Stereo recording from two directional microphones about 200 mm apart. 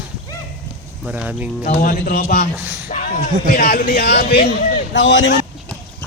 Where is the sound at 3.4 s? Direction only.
45° left (ahead or behind).